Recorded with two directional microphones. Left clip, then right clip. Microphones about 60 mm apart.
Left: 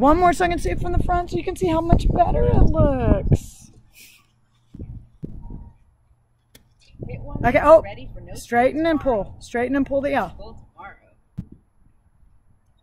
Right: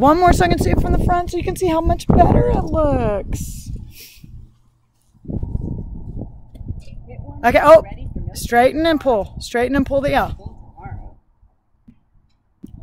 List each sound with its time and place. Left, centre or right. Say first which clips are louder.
0.0 s speech: right 3 dB; right
4.0 s a sound: right 3 dB; centre
7.3 s a woman's voice: right 4 dB; right
7.8 s speech: left 2 dB; left
8.3 s speech: right 5 dB; right